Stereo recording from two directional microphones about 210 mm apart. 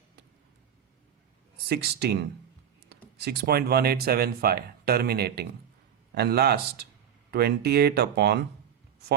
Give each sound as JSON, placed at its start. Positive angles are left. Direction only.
{"t": 1.7, "sound": "speech", "side_deg": -50}
{"t": 3.2, "sound": "speech", "side_deg": -50}